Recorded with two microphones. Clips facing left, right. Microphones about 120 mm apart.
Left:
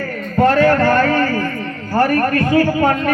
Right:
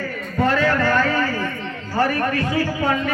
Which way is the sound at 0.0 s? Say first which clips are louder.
Left 6 dB; 50° left (ahead or behind).